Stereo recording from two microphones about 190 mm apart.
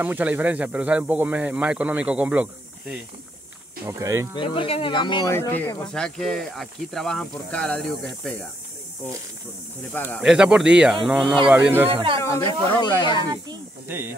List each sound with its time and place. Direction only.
0.0 s speech: 10° right (ahead or behind)
4.4 s speech: 30° left (ahead or behind)
5.3 s speech: 10° left (ahead or behind)
9.9 s speech: 10° left (ahead or behind)
10.2 s speech: 5° right (ahead or behind)
11.9 s speech: 25° right (ahead or behind)
12.2 s speech: 15° left (ahead or behind)
12.8 s speech: 25° left (ahead or behind)
13.8 s speech: 10° right (ahead or behind)